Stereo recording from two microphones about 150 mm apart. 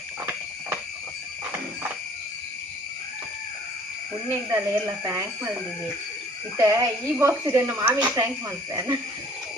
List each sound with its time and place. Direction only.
4.4 s speech: 15° right (ahead or behind)
6.6 s speech: 20° right (ahead or behind)